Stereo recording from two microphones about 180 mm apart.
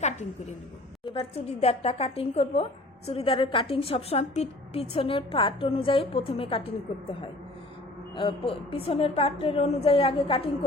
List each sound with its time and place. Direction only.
1.0 s a woman's voice: 30° left (ahead or behind)